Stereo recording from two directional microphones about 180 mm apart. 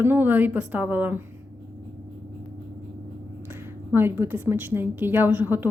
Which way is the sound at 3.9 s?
10° right (ahead or behind).